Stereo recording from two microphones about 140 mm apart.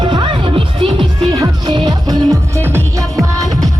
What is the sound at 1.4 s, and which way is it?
Music, 30° right (ahead or behind).